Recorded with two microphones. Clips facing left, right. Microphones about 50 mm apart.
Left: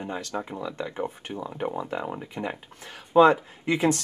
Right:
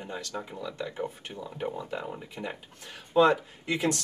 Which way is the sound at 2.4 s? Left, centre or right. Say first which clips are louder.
Left 5 dB; centre.